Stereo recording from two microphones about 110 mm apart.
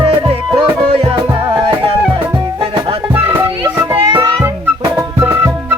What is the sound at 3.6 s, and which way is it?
Music, 40° right (ahead or behind).